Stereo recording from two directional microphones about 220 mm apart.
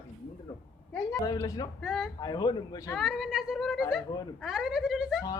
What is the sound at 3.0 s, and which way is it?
A woman's voice, centre (ahead or behind).